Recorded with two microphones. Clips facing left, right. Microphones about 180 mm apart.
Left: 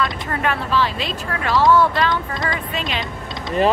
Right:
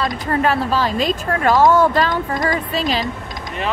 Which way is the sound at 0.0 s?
35° right (ahead or behind).